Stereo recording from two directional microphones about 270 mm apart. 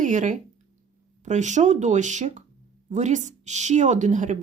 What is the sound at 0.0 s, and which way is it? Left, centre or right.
Speech, right.